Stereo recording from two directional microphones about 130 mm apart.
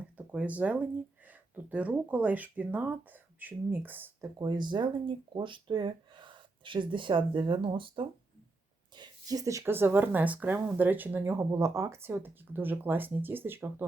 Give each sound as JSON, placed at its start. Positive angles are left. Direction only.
{"t": 0.2, "sound": "speech", "side_deg": -10}
{"t": 4.4, "sound": "speech", "side_deg": -35}
{"t": 9.0, "sound": "speech", "side_deg": -25}